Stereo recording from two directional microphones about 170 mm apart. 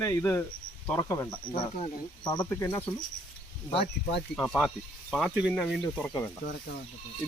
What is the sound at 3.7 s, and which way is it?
Speech, 35° left (ahead or behind).